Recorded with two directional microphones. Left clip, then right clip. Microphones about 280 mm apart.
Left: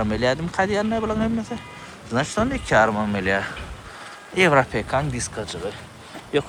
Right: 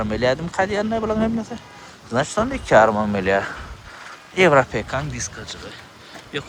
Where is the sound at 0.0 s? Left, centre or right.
Centre.